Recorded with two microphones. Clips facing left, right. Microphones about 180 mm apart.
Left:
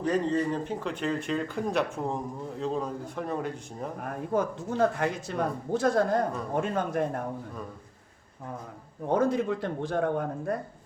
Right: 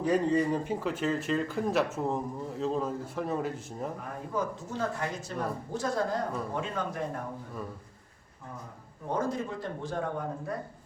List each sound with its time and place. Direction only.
0.0 s speech: 10° right (ahead or behind)
4.0 s speech: 55° left (ahead or behind)
9.1 s speech: 65° left (ahead or behind)